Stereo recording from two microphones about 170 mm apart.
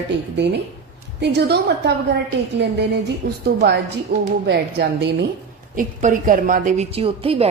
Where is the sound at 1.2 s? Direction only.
75° right (ahead or behind).